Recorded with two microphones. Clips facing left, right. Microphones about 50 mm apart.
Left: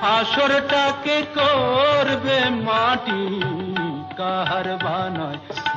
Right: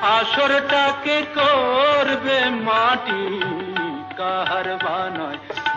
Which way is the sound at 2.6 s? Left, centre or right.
Centre.